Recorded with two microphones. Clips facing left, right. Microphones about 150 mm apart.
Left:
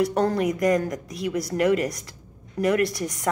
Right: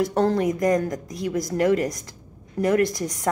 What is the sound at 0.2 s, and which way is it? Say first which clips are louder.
A woman's voice: right 1 dB; 20° right (ahead or behind).